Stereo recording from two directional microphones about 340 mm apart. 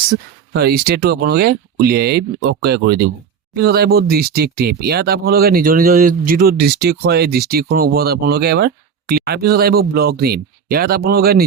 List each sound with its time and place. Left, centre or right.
0.5 s speech: right